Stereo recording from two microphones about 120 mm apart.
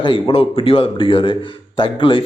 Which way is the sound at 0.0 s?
50° left (ahead or behind).